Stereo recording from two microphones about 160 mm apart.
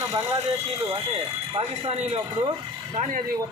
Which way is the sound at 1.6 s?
40° right (ahead or behind).